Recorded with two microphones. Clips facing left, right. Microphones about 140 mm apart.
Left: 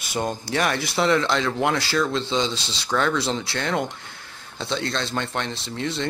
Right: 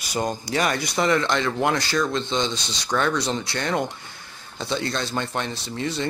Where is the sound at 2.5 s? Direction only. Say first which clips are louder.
Even; 30° left (ahead or behind).